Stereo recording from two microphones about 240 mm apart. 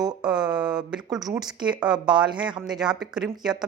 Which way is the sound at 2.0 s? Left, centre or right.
Centre.